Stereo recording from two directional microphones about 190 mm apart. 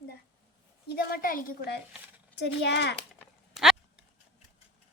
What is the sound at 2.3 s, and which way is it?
Speech, 60° left (ahead or behind).